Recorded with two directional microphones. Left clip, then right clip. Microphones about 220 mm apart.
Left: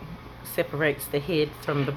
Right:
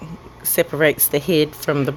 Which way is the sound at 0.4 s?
45° right (ahead or behind).